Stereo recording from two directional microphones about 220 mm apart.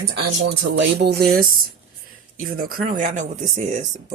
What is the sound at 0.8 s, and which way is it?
Speech, 45° right (ahead or behind).